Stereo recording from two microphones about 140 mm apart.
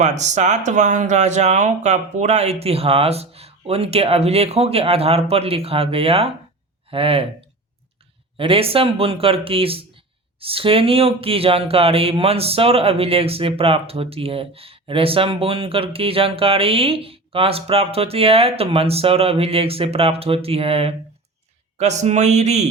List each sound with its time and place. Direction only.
0.0 s speech: 55° right (ahead or behind)
8.4 s speech: 40° right (ahead or behind)